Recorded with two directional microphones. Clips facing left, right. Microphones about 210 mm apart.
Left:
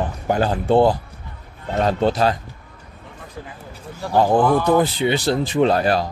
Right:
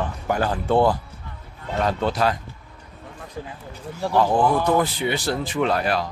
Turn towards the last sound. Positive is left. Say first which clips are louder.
# left 5 dB
turn(degrees=35)  # may be behind; listen again after turning